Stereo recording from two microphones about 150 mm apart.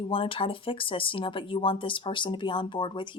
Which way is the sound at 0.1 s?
35° left (ahead or behind).